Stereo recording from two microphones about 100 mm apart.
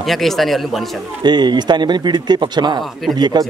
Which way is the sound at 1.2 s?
45° right (ahead or behind).